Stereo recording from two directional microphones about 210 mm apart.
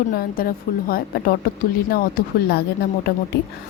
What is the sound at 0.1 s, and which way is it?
Speech, 45° left (ahead or behind).